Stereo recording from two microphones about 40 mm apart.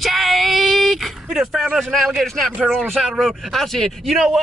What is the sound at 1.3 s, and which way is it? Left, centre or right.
Speech, centre.